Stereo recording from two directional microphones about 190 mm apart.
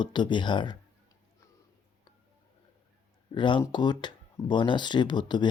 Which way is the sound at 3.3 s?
25° left (ahead or behind).